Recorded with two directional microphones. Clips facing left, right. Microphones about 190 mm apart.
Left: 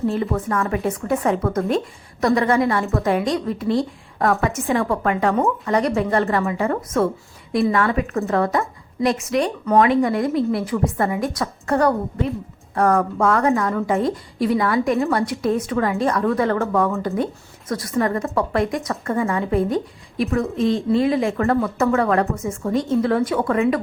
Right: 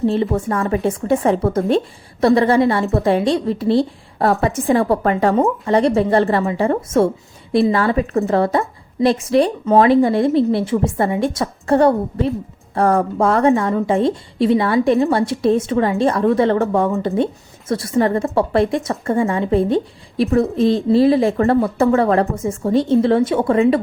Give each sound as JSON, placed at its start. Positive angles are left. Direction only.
{"t": 0.0, "sound": "a woman's voice", "side_deg": -25}